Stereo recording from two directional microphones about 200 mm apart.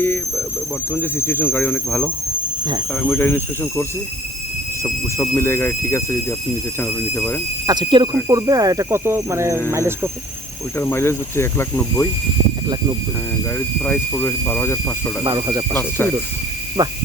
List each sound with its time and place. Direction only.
0.9 s speech: 10° left (ahead or behind)
7.7 s speech: 25° right (ahead or behind)
10.8 s speech: 10° left (ahead or behind)
13.6 s speech: 10° left (ahead or behind)
15.2 s speech: 20° right (ahead or behind)
15.7 s speech: 10° left (ahead or behind)
16.8 s speech: 20° right (ahead or behind)